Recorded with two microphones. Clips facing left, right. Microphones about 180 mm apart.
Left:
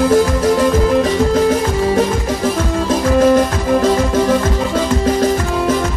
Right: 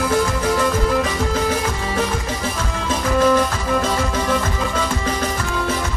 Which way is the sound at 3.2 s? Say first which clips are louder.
Left 4 dB; 40° left (ahead or behind).